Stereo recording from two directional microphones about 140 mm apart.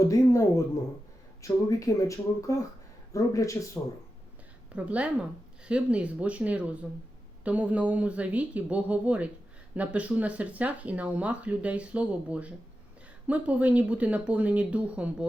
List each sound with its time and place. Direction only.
0.1 s speech: 20° left (ahead or behind)
4.7 s speech: 10° right (ahead or behind)